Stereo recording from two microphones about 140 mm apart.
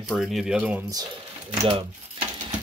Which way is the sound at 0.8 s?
30° right (ahead or behind).